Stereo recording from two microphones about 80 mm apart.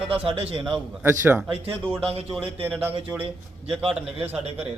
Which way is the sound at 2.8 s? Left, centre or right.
Right.